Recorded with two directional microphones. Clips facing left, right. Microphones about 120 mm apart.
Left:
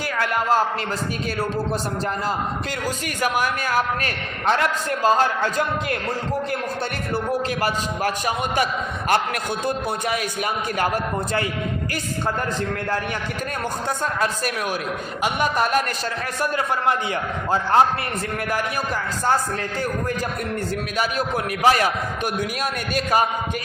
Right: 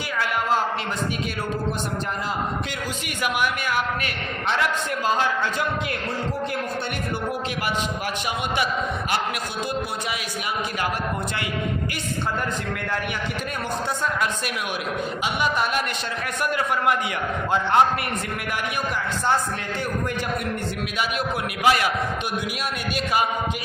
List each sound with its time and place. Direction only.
3.2 s a man's voice: 40° left (ahead or behind)
15.2 s a man's voice: 45° left (ahead or behind)
16.4 s a man's voice: 35° left (ahead or behind)
21.0 s a man's voice: 40° left (ahead or behind)